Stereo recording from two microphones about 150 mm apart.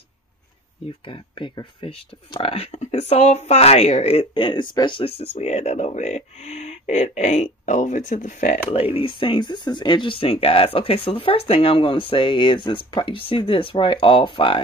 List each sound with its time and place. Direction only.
1.0 s speech: 35° left (ahead or behind); by 8.5 s 60° left (ahead or behind)
8.6 s speech: 40° left (ahead or behind)